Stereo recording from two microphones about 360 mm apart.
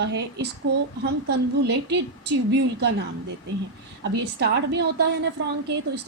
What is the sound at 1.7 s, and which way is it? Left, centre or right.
A woman's voice, right.